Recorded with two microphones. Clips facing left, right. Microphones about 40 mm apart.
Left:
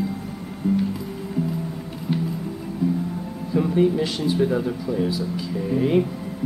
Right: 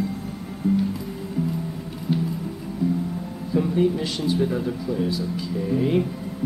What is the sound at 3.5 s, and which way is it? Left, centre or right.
Speech, centre.